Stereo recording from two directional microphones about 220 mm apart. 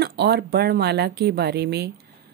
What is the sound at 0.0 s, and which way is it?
A woman's voice, 45° right (ahead or behind).